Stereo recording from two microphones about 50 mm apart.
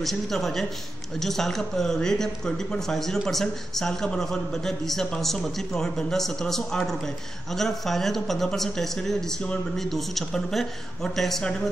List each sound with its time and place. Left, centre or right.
0.0 s speech: centre